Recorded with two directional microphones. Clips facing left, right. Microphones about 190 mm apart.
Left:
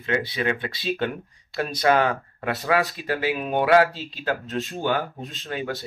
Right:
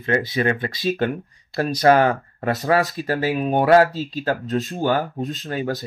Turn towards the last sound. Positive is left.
turn(degrees=-40)  # may be behind; listen again after turning